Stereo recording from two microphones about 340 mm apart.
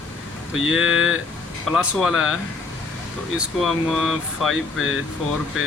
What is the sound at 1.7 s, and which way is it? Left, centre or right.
Speech, centre.